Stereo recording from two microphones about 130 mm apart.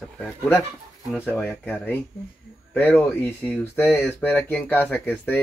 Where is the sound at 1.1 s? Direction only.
15° left (ahead or behind).